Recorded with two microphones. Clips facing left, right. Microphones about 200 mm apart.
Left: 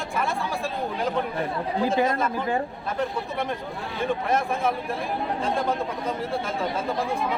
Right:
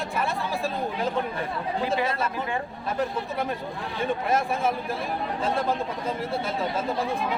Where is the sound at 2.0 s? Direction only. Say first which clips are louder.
Left 4 dB; 40° left (ahead or behind).